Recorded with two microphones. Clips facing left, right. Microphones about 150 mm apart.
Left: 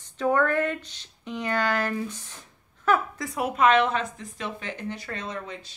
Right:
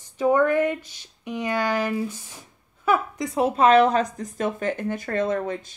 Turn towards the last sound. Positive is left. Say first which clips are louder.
# right 10 dB
turn(degrees=-50)  # may be behind; listen again after turning